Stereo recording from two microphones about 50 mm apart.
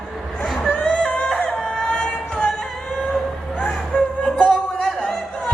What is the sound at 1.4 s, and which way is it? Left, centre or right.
Music, centre.